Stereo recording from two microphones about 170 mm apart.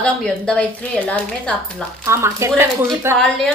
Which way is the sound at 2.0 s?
15° right (ahead or behind).